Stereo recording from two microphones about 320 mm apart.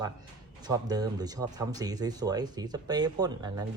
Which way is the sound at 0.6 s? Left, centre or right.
Centre.